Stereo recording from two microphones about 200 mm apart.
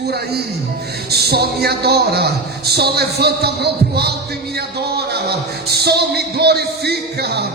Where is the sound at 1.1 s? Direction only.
55° right (ahead or behind).